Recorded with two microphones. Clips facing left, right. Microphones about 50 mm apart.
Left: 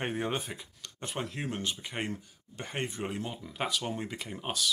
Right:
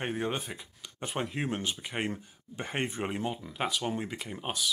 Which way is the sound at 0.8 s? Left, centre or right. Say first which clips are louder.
Right 3 dB; centre.